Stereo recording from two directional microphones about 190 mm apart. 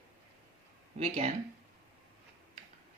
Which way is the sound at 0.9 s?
35° right (ahead or behind).